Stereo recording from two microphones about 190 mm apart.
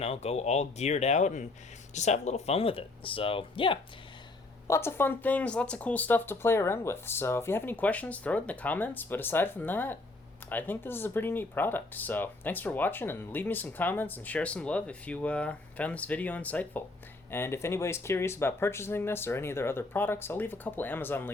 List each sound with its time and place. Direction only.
0.0 s speech: 35° left (ahead or behind)
4.7 s speech: 10° left (ahead or behind)